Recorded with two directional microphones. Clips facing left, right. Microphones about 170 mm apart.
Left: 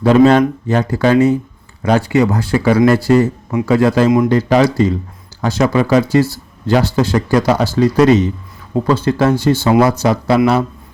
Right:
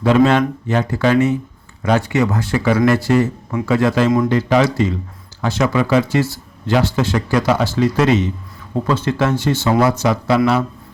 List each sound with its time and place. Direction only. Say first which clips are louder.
0.0 s speech: left 4 dB; 40° left (ahead or behind)